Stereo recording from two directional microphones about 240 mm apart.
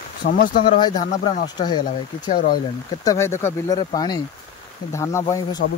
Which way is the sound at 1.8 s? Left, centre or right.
Left.